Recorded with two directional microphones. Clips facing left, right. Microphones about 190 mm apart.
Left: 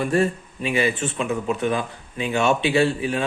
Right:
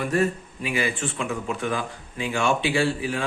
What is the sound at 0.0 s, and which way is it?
Speech, 30° left (ahead or behind).